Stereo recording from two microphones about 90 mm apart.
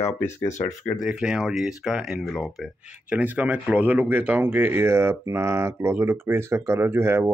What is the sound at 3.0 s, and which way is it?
Speech, 15° right (ahead or behind).